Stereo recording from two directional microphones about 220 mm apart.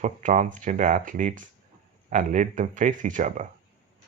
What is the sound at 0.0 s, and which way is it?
Speech, 35° right (ahead or behind).